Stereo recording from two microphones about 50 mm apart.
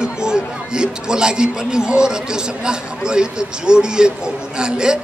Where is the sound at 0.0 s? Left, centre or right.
Centre.